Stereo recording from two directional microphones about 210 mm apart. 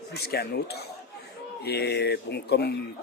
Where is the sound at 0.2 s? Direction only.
50° left (ahead or behind).